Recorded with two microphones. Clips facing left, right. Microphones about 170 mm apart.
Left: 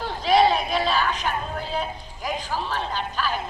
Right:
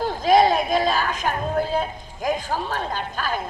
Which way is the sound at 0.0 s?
45° right (ahead or behind).